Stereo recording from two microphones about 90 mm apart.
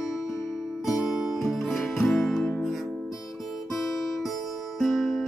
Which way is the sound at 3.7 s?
Centre (ahead or behind).